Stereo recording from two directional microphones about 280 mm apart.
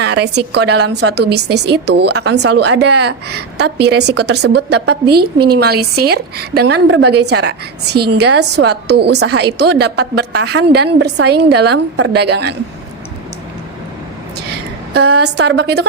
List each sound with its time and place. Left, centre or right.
0.0 s a woman's voice: right
14.3 s a woman's voice: right